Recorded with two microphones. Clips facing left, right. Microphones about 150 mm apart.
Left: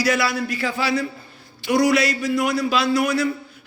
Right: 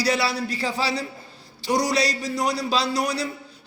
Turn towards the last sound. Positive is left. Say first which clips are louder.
# left 4 dB
turn(degrees=-35)  # may be behind; listen again after turning